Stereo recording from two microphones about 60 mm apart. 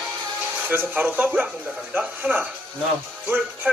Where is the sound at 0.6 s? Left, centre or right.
Right.